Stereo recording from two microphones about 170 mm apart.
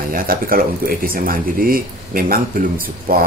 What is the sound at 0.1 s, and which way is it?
Speech, 55° right (ahead or behind).